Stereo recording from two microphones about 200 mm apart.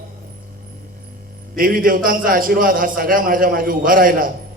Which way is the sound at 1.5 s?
45° right (ahead or behind).